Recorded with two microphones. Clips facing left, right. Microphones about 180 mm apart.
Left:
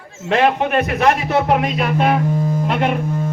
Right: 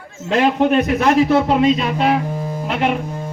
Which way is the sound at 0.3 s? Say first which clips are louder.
Right 1 dB; 65° left (ahead or behind).